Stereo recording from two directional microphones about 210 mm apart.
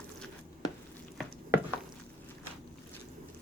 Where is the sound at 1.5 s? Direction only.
10° right (ahead or behind).